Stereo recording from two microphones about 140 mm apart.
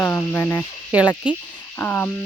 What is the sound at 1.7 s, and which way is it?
Speech, 15° left (ahead or behind).